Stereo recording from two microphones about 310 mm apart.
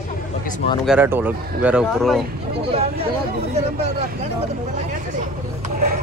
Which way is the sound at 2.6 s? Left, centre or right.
Centre.